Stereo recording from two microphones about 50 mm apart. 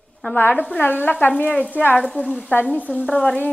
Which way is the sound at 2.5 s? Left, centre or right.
Left.